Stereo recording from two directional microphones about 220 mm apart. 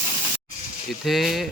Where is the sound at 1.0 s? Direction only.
Centre (ahead or behind).